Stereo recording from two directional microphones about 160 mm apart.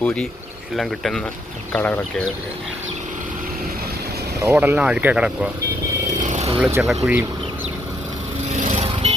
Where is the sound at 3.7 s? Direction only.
70° right (ahead or behind).